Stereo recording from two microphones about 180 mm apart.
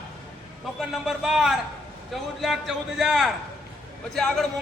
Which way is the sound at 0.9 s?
Centre (ahead or behind).